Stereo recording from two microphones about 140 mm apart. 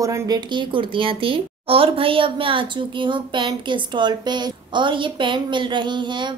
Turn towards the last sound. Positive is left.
turn(degrees=-35)  # may be behind; listen again after turning